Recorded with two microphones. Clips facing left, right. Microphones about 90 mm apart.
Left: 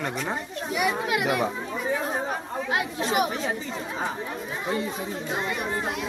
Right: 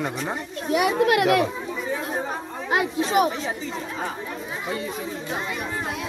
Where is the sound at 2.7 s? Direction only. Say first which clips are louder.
Right 5 dB; 30° right (ahead or behind).